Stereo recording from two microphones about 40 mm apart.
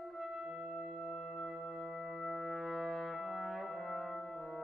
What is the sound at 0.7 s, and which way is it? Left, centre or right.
Music, centre.